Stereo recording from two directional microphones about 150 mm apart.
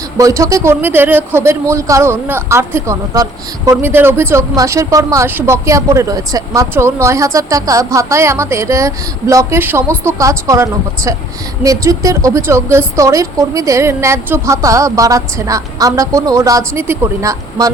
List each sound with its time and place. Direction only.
0.2 s a man's voice: 20° right (ahead or behind)